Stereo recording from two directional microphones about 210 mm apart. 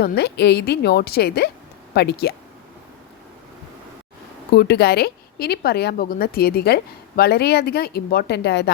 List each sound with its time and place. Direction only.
0.0 s a woman's voice: 50° left (ahead or behind)
4.5 s a woman's voice: 50° left (ahead or behind)